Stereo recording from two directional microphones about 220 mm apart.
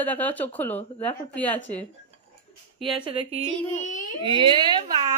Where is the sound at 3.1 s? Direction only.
25° right (ahead or behind).